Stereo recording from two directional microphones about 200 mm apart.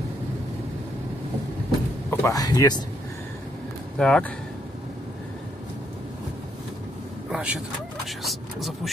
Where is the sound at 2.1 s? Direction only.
15° left (ahead or behind).